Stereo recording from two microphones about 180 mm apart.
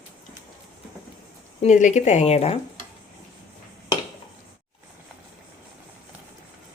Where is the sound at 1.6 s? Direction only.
45° left (ahead or behind).